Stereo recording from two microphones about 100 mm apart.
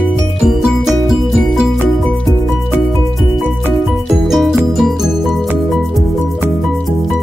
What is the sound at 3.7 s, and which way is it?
Music, centre (ahead or behind).